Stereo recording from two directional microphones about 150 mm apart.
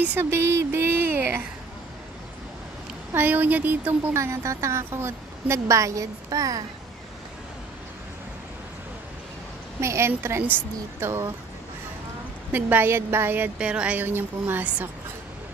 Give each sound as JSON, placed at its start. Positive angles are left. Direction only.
{"t": 0.0, "sound": "speech", "side_deg": -15}
{"t": 3.1, "sound": "speech", "side_deg": -15}
{"t": 9.8, "sound": "speech", "side_deg": -20}
{"t": 12.5, "sound": "speech", "side_deg": -15}